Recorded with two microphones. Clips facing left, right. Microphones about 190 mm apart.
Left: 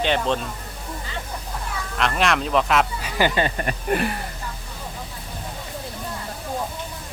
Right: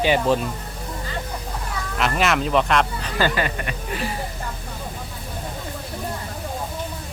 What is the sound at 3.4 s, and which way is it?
Speech, 40° left (ahead or behind).